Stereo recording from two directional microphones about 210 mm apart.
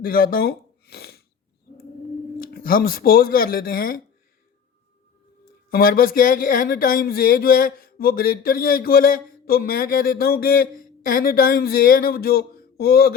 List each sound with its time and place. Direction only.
0.0 s speech: 45° left (ahead or behind)
2.4 s speech: 45° left (ahead or behind)
5.7 s speech: 45° left (ahead or behind)